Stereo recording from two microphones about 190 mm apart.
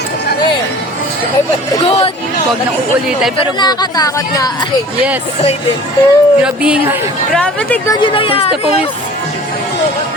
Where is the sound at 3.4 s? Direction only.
20° left (ahead or behind).